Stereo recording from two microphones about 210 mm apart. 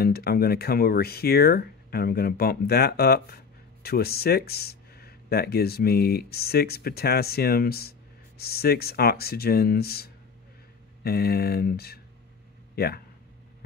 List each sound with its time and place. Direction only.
0.0 s speech: 45° left (ahead or behind)